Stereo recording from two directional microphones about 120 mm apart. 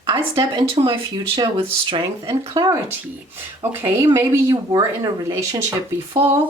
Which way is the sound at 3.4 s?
20° right (ahead or behind).